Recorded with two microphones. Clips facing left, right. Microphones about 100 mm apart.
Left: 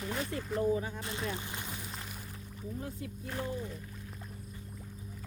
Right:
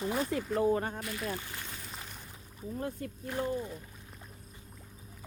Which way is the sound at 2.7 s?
55° right (ahead or behind).